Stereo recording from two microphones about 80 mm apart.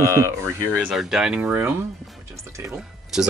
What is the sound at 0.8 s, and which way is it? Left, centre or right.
Speech, centre.